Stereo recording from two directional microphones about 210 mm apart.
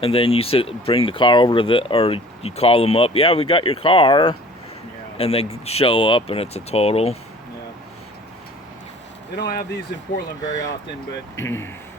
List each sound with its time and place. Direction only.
0.0 s speech: 25° left (ahead or behind)
9.3 s speech: 50° left (ahead or behind)
10.4 s speech: 15° left (ahead or behind)